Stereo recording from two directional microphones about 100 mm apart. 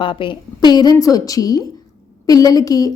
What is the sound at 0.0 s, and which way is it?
A woman's voice, 55° left (ahead or behind).